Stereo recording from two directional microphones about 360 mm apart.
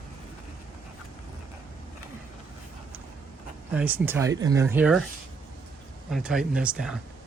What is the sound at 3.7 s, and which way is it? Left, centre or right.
Speech, centre.